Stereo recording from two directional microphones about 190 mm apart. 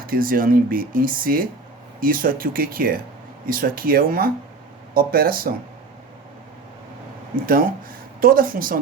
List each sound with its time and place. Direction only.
0.1 s speech: 50° right (ahead or behind)
7.4 s speech: 50° right (ahead or behind)